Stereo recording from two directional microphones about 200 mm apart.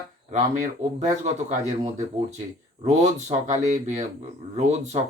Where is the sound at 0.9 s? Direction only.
35° right (ahead or behind).